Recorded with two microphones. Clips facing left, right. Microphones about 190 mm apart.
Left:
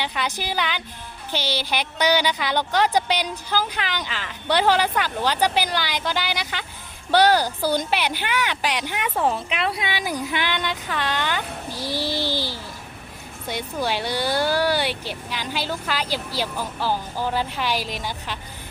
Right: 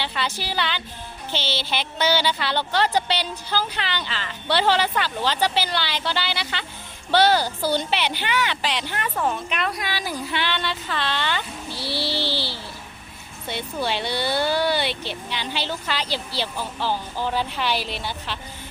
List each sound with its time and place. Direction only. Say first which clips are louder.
0.0 s a woman's voice: left 1 dB; 15° left (ahead or behind)
9.2 s speech: left 2 dB; 30° left (ahead or behind)
10.1 s a woman's voice: even; 10° left (ahead or behind)
11.7 s a sound: left 1 dB; 15° left (ahead or behind)
13.5 s a woman's voice: left 1 dB; 10° left (ahead or behind)